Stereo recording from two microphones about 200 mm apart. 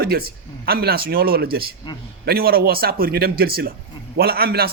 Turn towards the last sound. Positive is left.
turn(degrees=-50)  # may be behind; listen again after turning